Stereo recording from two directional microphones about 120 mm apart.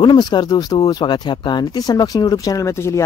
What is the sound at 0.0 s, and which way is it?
Speech, 35° left (ahead or behind).